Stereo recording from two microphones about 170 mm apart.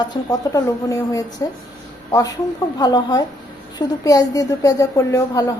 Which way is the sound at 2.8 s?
20° left (ahead or behind).